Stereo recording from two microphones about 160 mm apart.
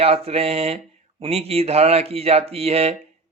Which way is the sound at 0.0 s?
40° right (ahead or behind).